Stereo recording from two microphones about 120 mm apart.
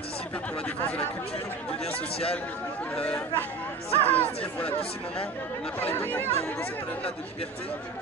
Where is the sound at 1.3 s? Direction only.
55° left (ahead or behind).